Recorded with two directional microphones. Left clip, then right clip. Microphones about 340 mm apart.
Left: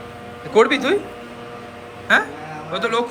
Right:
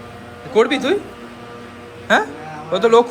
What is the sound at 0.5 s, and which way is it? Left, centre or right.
Speech, centre.